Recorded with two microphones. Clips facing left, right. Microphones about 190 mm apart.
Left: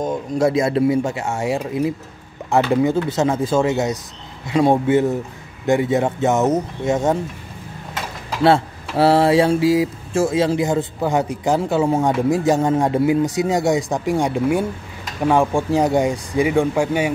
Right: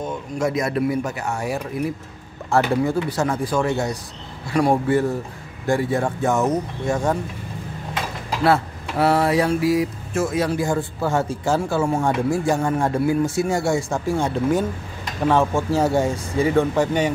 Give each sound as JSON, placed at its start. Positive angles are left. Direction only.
{"t": 0.0, "sound": "speech", "side_deg": 35}
{"t": 8.5, "sound": "speech", "side_deg": 30}